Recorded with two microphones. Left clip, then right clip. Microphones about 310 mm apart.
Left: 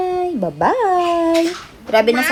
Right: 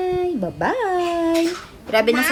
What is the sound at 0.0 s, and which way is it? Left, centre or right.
Dog, centre.